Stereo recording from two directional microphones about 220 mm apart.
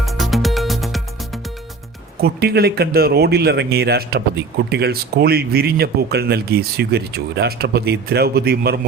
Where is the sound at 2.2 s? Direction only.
45° right (ahead or behind).